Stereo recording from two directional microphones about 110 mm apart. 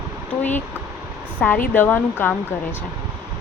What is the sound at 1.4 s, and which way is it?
Speech, 15° left (ahead or behind).